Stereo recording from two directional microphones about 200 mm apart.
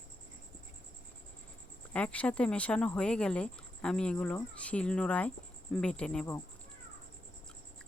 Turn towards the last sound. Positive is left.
turn(degrees=10)  # may be behind; listen again after turning